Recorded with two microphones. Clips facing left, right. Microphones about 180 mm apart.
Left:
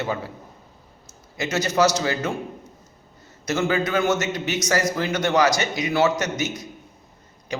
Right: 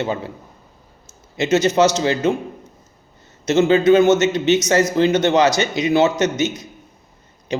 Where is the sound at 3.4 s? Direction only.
25° right (ahead or behind).